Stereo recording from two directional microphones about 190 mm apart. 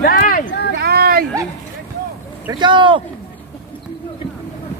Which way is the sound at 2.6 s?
25° right (ahead or behind).